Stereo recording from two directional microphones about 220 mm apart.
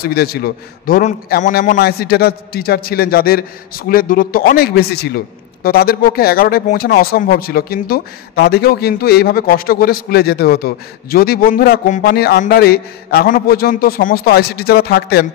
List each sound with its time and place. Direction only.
0.0 s a man's voice: 45° left (ahead or behind)